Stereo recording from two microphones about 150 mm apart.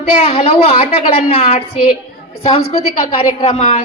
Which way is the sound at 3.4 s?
40° left (ahead or behind).